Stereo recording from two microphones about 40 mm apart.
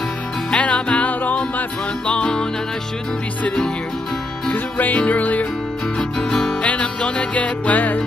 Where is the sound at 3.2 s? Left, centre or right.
Left.